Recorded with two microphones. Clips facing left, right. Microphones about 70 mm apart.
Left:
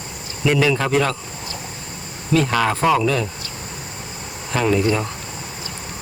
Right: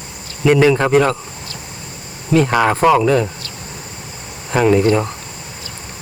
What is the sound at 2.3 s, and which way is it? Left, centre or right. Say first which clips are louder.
Speech: right 5 dB; right.